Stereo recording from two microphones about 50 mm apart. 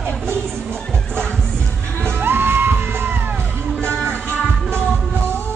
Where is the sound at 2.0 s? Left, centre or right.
Right.